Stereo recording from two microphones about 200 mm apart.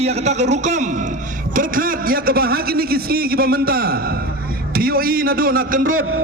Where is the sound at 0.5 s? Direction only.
35° right (ahead or behind).